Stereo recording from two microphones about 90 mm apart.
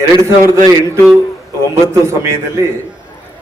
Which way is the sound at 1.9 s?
35° right (ahead or behind).